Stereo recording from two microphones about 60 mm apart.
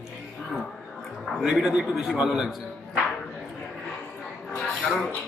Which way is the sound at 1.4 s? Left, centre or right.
Centre.